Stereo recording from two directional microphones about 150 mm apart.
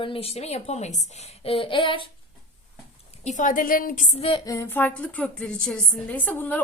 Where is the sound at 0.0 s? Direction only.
40° left (ahead or behind).